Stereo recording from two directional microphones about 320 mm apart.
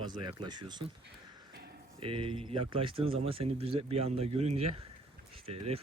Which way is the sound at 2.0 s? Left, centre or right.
Centre.